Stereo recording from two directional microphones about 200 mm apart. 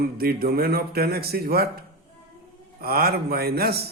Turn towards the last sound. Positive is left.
turn(degrees=-50)  # may be behind; listen again after turning